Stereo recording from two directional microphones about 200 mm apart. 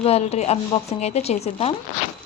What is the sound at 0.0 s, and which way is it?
Speech, 30° left (ahead or behind).